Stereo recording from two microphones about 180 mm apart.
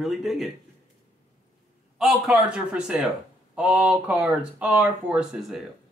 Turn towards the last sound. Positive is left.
turn(degrees=-5)  # may be behind; listen again after turning